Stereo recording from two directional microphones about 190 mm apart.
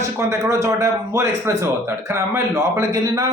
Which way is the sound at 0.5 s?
15° right (ahead or behind).